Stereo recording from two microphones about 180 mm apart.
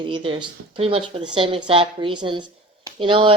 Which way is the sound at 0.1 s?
30° right (ahead or behind).